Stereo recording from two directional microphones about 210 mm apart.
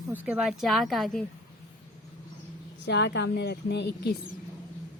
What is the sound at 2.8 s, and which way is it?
A woman's voice, 55° left (ahead or behind).